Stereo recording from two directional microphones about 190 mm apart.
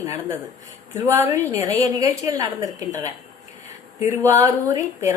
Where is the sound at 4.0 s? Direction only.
15° right (ahead or behind).